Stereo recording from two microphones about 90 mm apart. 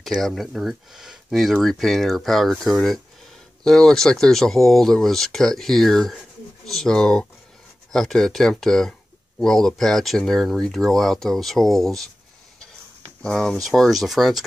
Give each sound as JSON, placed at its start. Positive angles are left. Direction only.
{"t": 0.0, "sound": "speech", "side_deg": 0}
{"t": 13.2, "sound": "speech", "side_deg": 5}